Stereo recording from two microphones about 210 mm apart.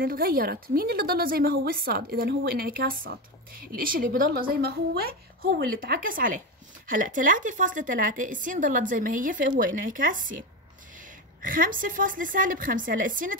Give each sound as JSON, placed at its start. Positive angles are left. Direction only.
{"t": 0.0, "sound": "a woman's voice", "side_deg": -45}